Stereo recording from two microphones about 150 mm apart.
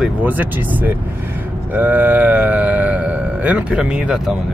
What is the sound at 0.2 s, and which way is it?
Speech, 10° right (ahead or behind).